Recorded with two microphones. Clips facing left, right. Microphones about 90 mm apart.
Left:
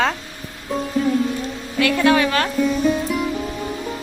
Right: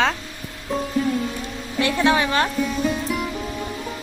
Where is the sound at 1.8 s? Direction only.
25° right (ahead or behind).